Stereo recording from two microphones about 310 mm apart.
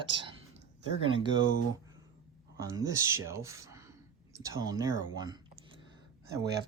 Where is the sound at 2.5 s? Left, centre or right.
Centre.